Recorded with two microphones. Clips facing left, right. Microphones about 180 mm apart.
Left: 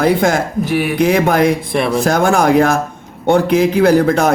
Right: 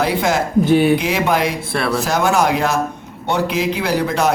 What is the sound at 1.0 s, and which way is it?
Speech, 50° left (ahead or behind).